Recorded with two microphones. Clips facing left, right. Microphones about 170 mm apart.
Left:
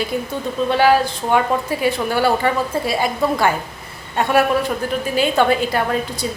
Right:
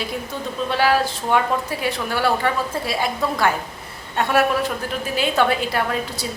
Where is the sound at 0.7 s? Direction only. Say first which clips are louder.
Left 4 dB; centre (ahead or behind).